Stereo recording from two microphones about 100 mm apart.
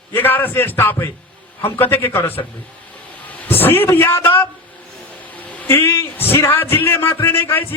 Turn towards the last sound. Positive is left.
turn(degrees=20)  # may be behind; listen again after turning